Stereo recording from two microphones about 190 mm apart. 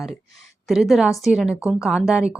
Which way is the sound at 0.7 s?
Centre (ahead or behind).